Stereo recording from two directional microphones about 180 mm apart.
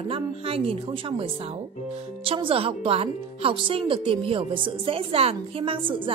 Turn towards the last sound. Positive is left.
turn(degrees=-30)  # may be behind; listen again after turning